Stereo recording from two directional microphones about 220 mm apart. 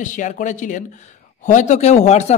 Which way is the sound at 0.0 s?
35° left (ahead or behind).